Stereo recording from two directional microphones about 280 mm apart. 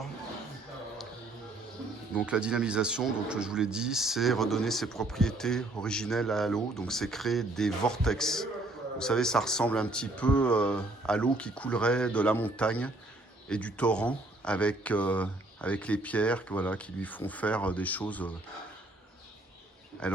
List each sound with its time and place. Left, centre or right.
2.1 s speech: centre
20.0 s speech: centre